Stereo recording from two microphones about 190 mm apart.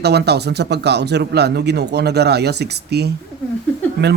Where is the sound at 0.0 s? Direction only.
60° right (ahead or behind).